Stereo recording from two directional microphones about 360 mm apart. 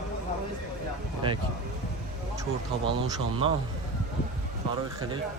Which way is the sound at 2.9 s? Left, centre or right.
Centre.